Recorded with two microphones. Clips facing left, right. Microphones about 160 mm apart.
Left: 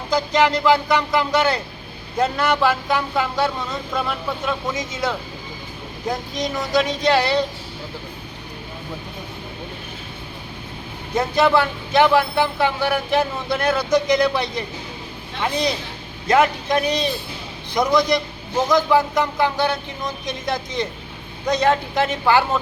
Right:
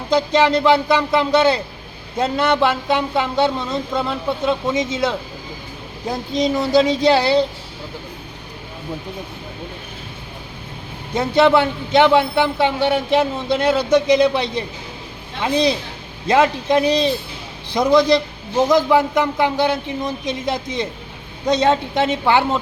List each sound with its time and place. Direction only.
0.1 s speech: 25° right (ahead or behind)
6.3 s speech: 30° right (ahead or behind)
11.3 s speech: 25° right (ahead or behind)
16.2 s speech: 25° right (ahead or behind)